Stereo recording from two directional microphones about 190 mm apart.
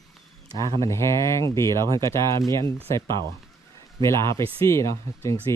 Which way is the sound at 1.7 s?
20° right (ahead or behind).